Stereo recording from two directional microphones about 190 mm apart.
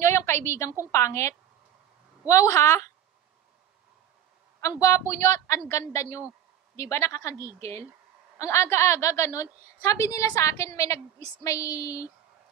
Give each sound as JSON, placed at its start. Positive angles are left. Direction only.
{"t": 0.0, "sound": "a sound", "side_deg": 15}
{"t": 0.9, "sound": "a woman's voice", "side_deg": 15}
{"t": 4.6, "sound": "a woman's voice", "side_deg": 15}
{"t": 8.4, "sound": "a woman's voice", "side_deg": 15}